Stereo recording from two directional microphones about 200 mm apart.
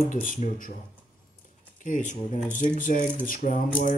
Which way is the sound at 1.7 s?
40° left (ahead or behind).